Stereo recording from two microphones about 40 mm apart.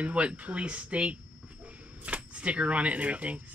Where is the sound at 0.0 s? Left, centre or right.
Right.